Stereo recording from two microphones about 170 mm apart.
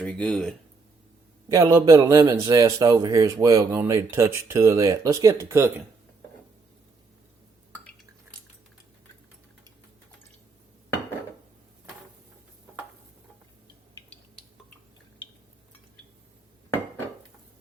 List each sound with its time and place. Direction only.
0.0 s speech: 5° left (ahead or behind)
1.5 s a man's voice: 20° right (ahead or behind)